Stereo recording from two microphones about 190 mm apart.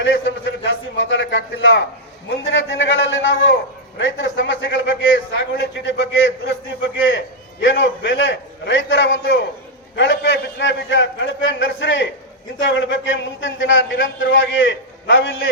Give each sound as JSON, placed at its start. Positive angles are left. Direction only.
{"t": 0.0, "sound": "a man's voice", "side_deg": 80}
{"t": 7.6, "sound": "a man's voice", "side_deg": 80}